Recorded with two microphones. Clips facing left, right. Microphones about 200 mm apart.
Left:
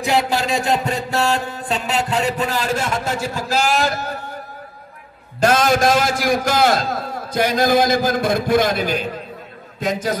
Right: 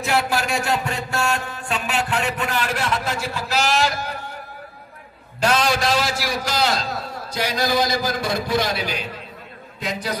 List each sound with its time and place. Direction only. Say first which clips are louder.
0.0 s a sound: left 3 dB; 15° left (ahead or behind)
2.0 s a man's voice: left 4 dB; 40° left (ahead or behind)
5.4 s a man's voice: left 5 dB; 45° left (ahead or behind)